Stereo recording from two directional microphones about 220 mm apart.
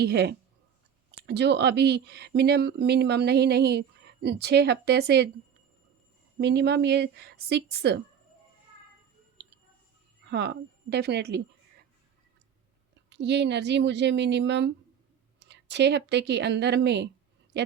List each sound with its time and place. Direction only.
0.0 s speech: 50° right (ahead or behind)
6.4 s speech: 50° right (ahead or behind)
10.2 s speech: 50° right (ahead or behind)
13.1 s speech: 50° right (ahead or behind)